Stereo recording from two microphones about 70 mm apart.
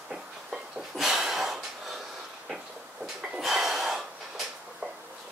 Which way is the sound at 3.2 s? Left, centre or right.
Centre.